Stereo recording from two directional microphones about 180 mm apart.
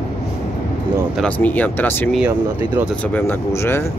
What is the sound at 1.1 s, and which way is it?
Speech, 5° left (ahead or behind).